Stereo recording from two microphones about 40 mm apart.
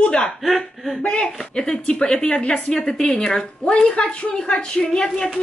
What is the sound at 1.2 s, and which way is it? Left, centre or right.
A man's voice, centre.